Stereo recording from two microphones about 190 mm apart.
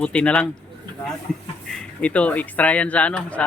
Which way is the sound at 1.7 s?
5° left (ahead or behind).